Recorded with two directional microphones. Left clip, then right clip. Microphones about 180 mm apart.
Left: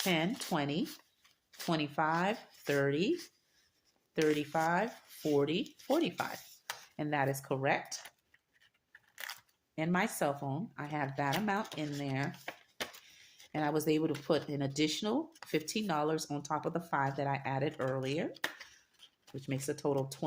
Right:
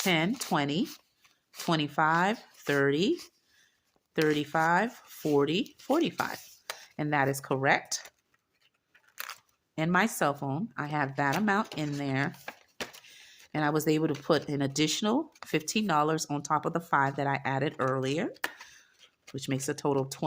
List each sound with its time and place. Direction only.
0.0 s speech: 40° right (ahead or behind)
5.2 s speech: 30° right (ahead or behind); by 8.0 s 45° right (ahead or behind)
9.1 s a sound: 25° right (ahead or behind)
9.7 s speech: 45° right (ahead or behind)
13.5 s speech: 40° right (ahead or behind)
19.4 s speech: 45° right (ahead or behind)